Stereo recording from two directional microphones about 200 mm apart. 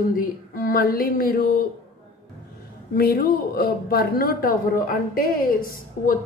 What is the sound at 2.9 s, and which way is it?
Speech, 50° left (ahead or behind).